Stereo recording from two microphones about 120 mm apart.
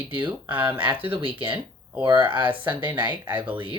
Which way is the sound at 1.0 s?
45° right (ahead or behind).